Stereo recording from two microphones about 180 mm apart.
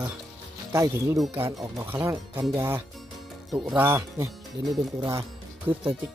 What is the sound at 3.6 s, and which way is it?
Speech, 10° right (ahead or behind).